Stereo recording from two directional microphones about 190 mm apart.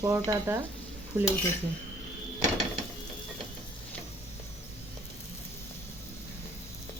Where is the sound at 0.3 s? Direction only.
15° right (ahead or behind).